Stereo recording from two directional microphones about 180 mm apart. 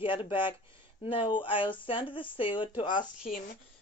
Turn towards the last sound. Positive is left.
turn(degrees=25)  # may be behind; listen again after turning